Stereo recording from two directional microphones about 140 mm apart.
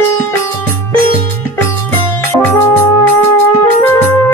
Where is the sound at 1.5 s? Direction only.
15° left (ahead or behind).